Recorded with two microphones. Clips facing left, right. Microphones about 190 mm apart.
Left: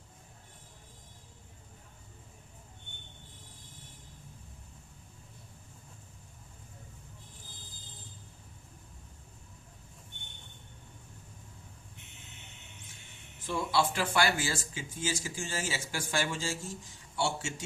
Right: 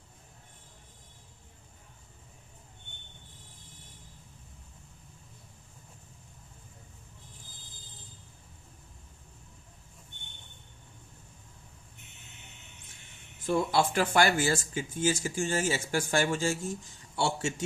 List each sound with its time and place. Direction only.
13.5 s a man's voice: 50° right (ahead or behind)